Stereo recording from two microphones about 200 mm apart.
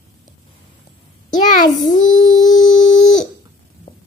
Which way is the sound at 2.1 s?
75° left (ahead or behind).